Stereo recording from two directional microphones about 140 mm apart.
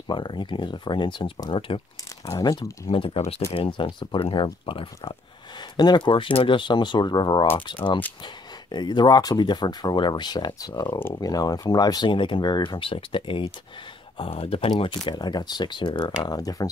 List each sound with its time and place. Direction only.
0.1 s speech: 35° left (ahead or behind)
2.2 s speech: 25° left (ahead or behind)
2.9 s speech: 40° left (ahead or behind)